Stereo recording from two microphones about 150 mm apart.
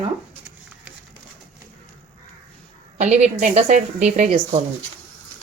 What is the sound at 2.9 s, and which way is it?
Speech, 50° right (ahead or behind).